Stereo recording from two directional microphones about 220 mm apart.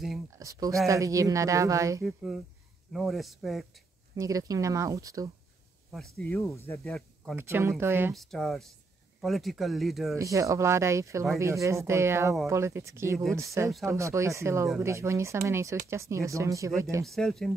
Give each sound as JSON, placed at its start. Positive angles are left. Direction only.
{"t": 0.3, "sound": "speech", "side_deg": -15}
{"t": 2.0, "sound": "speech", "side_deg": 0}
{"t": 4.1, "sound": "speech", "side_deg": -15}
{"t": 5.9, "sound": "speech", "side_deg": 0}
{"t": 7.3, "sound": "speech", "side_deg": -10}
{"t": 8.1, "sound": "speech", "side_deg": 0}
{"t": 10.1, "sound": "speech", "side_deg": -15}
{"t": 17.0, "sound": "speech", "side_deg": 0}